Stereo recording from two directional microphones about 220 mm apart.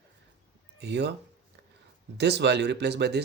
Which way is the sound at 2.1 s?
50° right (ahead or behind).